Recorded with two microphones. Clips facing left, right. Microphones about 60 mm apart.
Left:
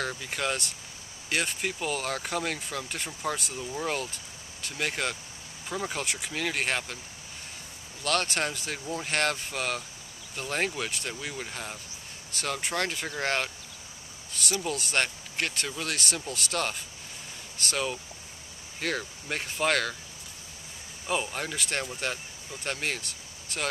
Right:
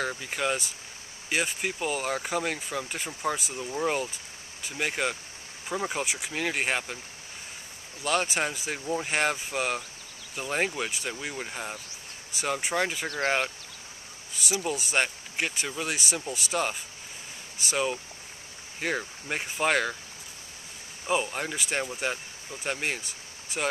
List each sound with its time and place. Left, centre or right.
0.0 s speech: centre
8.0 s speech: centre
21.1 s speech: centre